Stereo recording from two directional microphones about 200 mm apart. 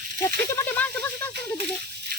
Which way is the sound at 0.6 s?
10° left (ahead or behind).